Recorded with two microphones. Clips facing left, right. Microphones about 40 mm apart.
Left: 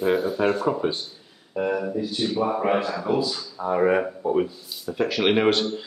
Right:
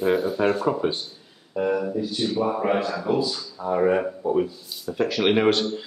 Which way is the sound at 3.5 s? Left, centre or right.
Centre.